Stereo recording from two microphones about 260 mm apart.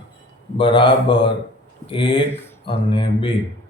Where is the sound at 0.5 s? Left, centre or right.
Centre.